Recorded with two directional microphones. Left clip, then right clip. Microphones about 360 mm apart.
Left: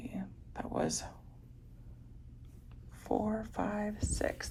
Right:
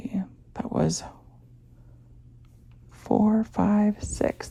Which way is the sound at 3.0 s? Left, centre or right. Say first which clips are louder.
Right 10 dB; right.